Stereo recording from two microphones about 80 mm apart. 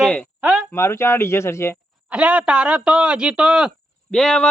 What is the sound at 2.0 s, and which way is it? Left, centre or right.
A man's voice, centre.